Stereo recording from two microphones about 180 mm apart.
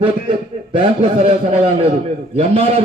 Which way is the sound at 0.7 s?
35° right (ahead or behind).